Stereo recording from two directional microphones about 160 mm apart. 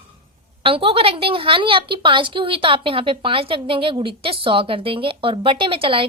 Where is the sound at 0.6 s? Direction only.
35° right (ahead or behind).